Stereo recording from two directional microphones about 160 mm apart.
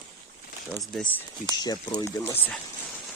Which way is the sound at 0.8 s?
5° left (ahead or behind).